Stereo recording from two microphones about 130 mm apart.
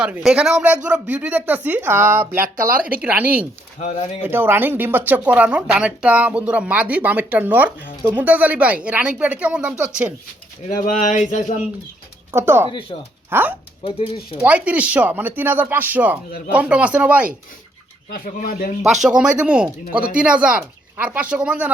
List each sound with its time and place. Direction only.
0.0 s speech: 5° right (ahead or behind)
3.8 s speech: 60° left (ahead or behind)
4.2 s speech: 15° right (ahead or behind)
10.7 s a sound: 80° left
12.3 s speech: 20° right (ahead or behind)
13.8 s speech: 40° left (ahead or behind)
14.4 s speech: 10° right (ahead or behind)
18.1 s speech: 90° left
19.0 s speech: 10° right (ahead or behind)